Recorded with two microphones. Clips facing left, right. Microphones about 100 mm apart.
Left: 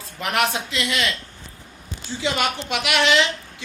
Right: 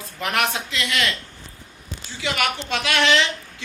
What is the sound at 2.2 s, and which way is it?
A woman's voice, 25° left (ahead or behind).